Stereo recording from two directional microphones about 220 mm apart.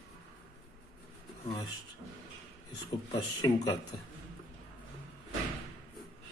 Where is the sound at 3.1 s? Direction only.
20° left (ahead or behind).